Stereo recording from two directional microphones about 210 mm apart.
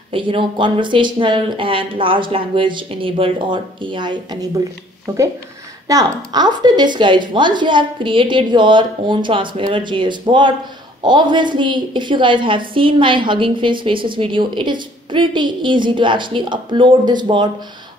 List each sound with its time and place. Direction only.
0.1 s a woman's voice: 25° right (ahead or behind)